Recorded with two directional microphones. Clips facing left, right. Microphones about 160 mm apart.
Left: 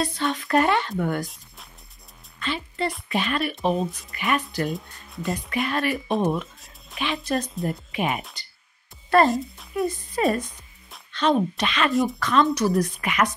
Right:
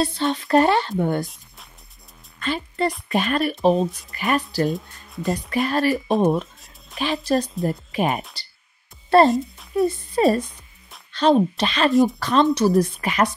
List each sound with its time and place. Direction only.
0.0 s speech: 30° right (ahead or behind)
1.2 s music: centre (ahead or behind)
2.4 s a woman's voice: 45° right (ahead or behind)
4.6 s speech: centre (ahead or behind)
5.5 s speech: 35° right (ahead or behind)
9.3 s a child's voice: centre (ahead or behind)
9.8 s speech: 30° right (ahead or behind)
11.9 s a child's voice: centre (ahead or behind)
12.2 s speech: 35° right (ahead or behind)